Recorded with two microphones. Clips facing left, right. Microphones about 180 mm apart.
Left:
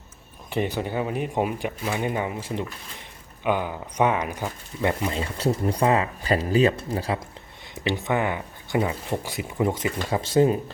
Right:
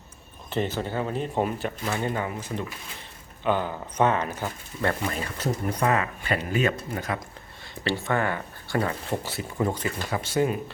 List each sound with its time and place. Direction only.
0.5 s speech: 15° left (ahead or behind)
3.4 s speech: 10° left (ahead or behind)
5.2 s speech: 30° left (ahead or behind)
7.9 s speech: 20° left (ahead or behind)